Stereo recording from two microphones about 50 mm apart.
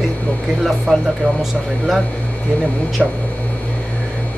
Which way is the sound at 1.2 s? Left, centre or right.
Left.